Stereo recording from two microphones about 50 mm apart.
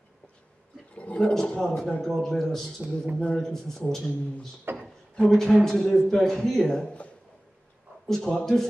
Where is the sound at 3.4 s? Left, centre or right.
Centre.